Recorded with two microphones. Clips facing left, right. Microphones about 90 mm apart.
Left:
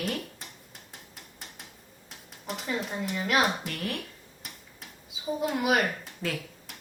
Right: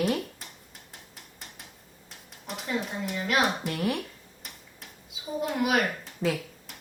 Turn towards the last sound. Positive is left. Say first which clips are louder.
# even
turn(degrees=0)  # may be behind; listen again after turning